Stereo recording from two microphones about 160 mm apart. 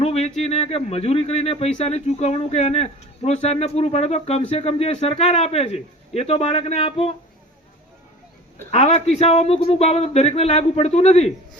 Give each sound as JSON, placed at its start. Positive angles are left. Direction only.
{"t": 0.0, "sound": "speech", "side_deg": 40}
{"t": 8.7, "sound": "speech", "side_deg": 40}